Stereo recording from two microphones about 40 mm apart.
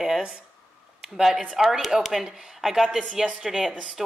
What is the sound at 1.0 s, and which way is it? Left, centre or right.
Speech, centre.